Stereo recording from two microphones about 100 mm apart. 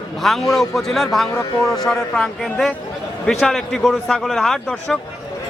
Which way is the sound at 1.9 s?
Centre (ahead or behind).